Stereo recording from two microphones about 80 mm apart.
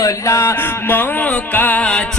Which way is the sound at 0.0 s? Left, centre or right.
Left.